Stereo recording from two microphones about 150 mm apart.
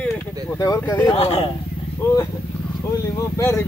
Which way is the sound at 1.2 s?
40° left (ahead or behind).